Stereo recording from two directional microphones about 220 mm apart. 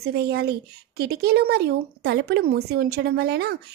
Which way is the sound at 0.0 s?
45° right (ahead or behind).